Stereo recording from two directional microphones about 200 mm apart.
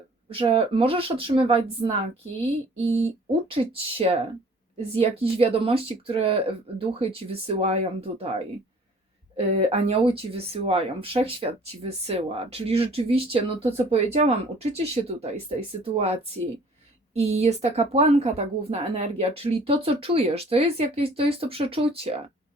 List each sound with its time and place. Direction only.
0.3 s speech: 25° right (ahead or behind)
9.5 s speech: 30° right (ahead or behind)